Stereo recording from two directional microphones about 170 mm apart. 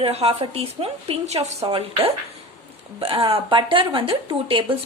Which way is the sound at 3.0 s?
30° right (ahead or behind).